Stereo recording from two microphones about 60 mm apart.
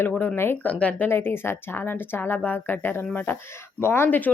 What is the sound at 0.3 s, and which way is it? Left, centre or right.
Speech, left.